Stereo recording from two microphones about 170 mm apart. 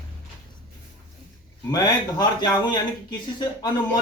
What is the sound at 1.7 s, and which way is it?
Speech, 25° left (ahead or behind).